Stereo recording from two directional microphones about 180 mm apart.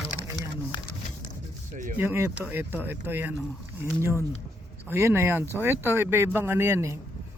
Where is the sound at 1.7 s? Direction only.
45° right (ahead or behind).